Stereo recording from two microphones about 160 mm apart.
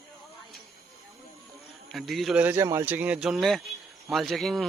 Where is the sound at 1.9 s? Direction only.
Centre (ahead or behind).